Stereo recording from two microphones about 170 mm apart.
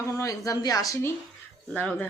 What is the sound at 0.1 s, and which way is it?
A woman's voice, 20° left (ahead or behind).